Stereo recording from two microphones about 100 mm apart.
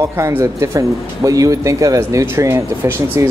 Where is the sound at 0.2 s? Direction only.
30° right (ahead or behind).